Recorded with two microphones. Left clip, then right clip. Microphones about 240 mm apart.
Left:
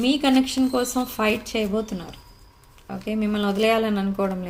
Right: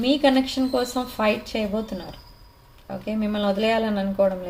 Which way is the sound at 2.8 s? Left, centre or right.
Left.